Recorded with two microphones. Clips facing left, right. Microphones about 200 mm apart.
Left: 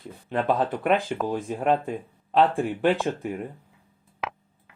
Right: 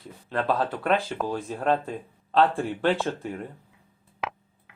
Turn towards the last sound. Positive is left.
turn(degrees=0)  # may be behind; listen again after turning